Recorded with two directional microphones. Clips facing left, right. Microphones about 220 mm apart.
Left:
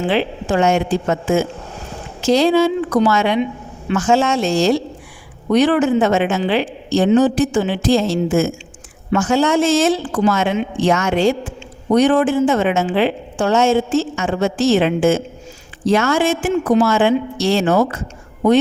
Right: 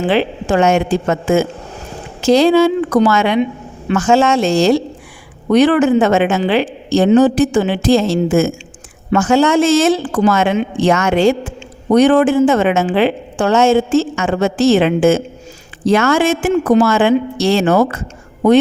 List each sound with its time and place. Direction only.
0.1 s a woman's voice: 80° right
5.5 s a woman's voice: 80° right
10.2 s a woman's voice: 80° right
11.9 s a woman's voice: 80° right